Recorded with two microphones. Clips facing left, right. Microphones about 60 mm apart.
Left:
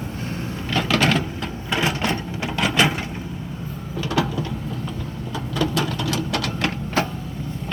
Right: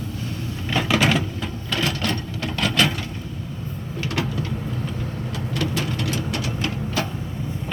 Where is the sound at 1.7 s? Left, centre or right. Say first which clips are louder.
Left 2 dB; left.